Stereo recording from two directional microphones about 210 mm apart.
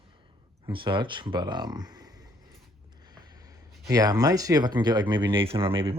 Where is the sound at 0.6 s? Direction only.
25° right (ahead or behind).